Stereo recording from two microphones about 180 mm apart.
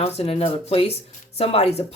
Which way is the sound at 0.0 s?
35° left (ahead or behind).